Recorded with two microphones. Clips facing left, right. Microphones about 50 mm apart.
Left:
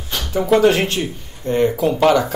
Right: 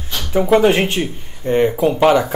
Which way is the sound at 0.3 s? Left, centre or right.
Right.